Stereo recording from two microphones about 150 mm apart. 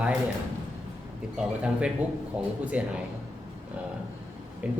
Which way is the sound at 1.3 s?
5° right (ahead or behind).